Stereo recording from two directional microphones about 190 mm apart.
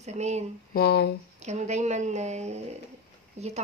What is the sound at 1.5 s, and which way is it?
Speech, 35° right (ahead or behind).